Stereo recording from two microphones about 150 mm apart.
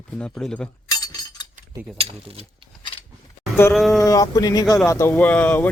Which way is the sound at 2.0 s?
40° right (ahead or behind).